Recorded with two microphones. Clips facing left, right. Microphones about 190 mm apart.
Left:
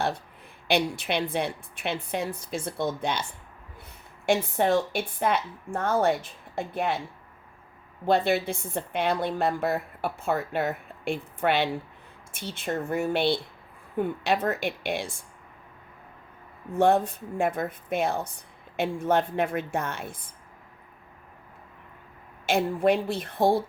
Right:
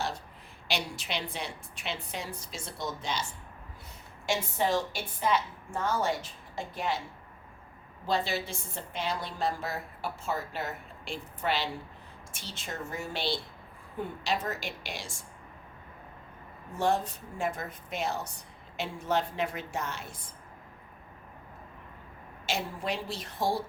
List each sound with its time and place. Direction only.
0.7 s a woman's voice: 55° left (ahead or behind)
4.3 s a woman's voice: 60° left (ahead or behind)
8.0 s a woman's voice: 60° left (ahead or behind)
16.7 s a woman's voice: 55° left (ahead or behind)
22.4 s a woman's voice: 55° left (ahead or behind)